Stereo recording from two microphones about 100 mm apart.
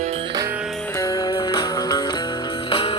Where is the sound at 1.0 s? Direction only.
45° left (ahead or behind).